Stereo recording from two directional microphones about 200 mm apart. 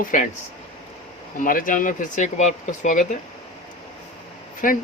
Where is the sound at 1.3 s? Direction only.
45° left (ahead or behind).